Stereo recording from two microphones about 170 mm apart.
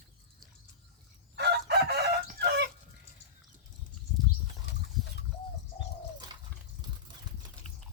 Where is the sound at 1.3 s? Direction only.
75° right (ahead or behind).